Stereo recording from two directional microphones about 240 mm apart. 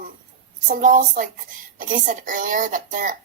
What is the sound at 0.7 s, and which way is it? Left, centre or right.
Speech, right.